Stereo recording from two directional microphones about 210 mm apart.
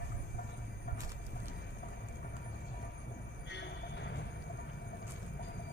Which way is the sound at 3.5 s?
55° left (ahead or behind).